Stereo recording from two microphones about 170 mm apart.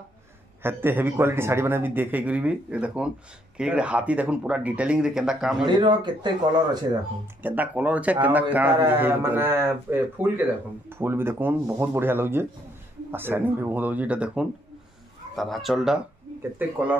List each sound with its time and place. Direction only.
0.6 s a man's voice: 15° right (ahead or behind)
5.7 s speech: 25° right (ahead or behind)
7.4 s a man's voice: 10° right (ahead or behind)